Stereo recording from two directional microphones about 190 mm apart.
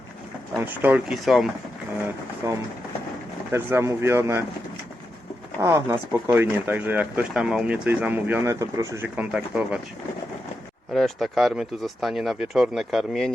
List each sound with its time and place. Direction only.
0.5 s speech: 10° right (ahead or behind)
2.4 s speech: 15° right (ahead or behind)
5.5 s speech: 15° right (ahead or behind)
10.9 s speech: centre (ahead or behind)